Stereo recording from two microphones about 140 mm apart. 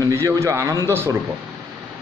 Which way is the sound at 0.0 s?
20° right (ahead or behind).